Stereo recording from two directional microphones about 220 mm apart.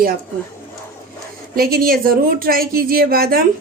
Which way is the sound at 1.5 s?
40° right (ahead or behind).